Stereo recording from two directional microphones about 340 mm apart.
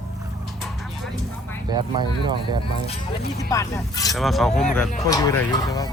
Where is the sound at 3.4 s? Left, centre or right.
Centre.